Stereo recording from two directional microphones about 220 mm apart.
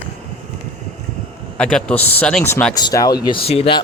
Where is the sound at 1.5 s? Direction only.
5° left (ahead or behind).